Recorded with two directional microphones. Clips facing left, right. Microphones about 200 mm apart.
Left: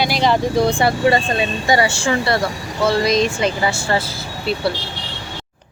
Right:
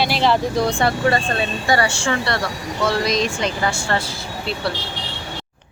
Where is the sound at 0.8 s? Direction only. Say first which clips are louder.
Left 3 dB; 15° left (ahead or behind).